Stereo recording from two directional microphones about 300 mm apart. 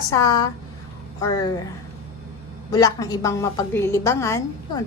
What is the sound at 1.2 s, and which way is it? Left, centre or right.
Speech, centre.